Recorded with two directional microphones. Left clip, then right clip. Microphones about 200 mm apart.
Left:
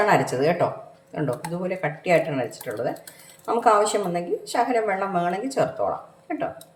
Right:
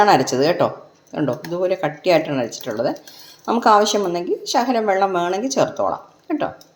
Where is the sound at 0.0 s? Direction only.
40° right (ahead or behind).